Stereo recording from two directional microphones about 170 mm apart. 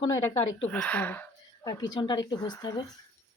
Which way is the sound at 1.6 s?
25° left (ahead or behind).